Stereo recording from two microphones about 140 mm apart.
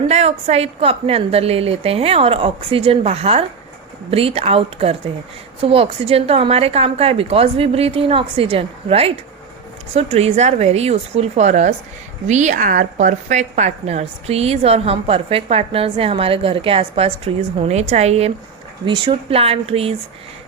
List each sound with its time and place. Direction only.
0.1 s a woman's voice: 50° right (ahead or behind)
18.9 s a woman's voice: 35° right (ahead or behind)